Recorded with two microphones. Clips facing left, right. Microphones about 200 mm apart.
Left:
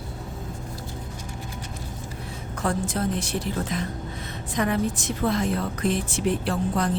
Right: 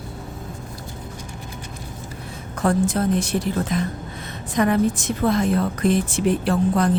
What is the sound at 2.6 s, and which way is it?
A woman's voice, 45° right (ahead or behind).